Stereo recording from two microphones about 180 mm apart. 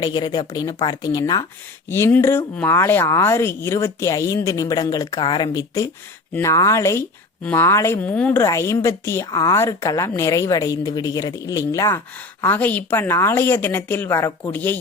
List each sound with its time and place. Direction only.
0.0 s speech: 20° left (ahead or behind)